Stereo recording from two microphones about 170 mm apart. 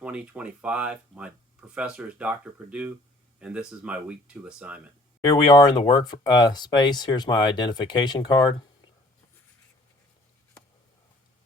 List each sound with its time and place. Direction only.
0.0 s speech: 5° right (ahead or behind)
5.2 s speech: 25° left (ahead or behind)